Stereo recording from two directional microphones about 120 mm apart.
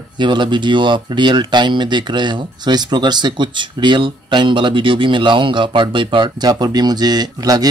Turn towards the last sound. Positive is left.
turn(degrees=-35)  # may be behind; listen again after turning